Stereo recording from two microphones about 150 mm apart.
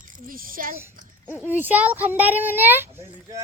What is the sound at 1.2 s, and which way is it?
A child's voice, 10° right (ahead or behind).